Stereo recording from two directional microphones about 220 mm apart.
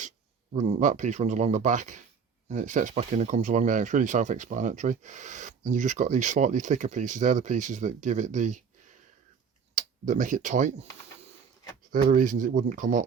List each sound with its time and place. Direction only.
0.5 s speech: 30° right (ahead or behind)
9.7 s speech: 35° right (ahead or behind)
11.9 s speech: 40° right (ahead or behind)